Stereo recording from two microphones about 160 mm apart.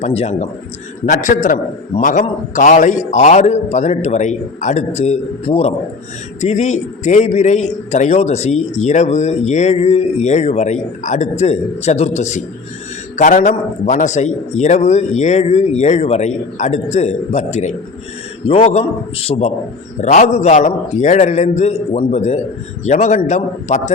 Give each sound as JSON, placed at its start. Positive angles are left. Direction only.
{"t": 0.0, "sound": "a man's voice", "side_deg": 40}
{"t": 1.0, "sound": "a man's voice", "side_deg": 50}